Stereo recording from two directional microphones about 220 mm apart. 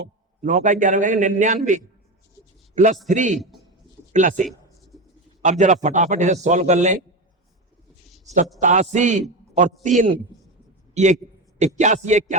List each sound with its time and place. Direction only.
0.0 s a man's voice: 35° right (ahead or behind)
2.7 s a man's voice: 35° right (ahead or behind)
3.3 s speech: centre (ahead or behind)
4.1 s a man's voice: 35° right (ahead or behind)
8.6 s a man's voice: 35° right (ahead or behind)